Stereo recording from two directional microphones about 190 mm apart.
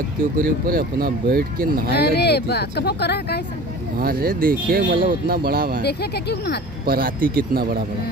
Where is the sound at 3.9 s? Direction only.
50° right (ahead or behind).